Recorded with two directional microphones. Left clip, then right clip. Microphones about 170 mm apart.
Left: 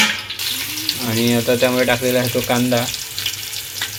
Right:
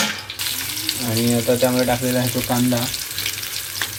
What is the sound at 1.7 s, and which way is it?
Speech, 15° left (ahead or behind).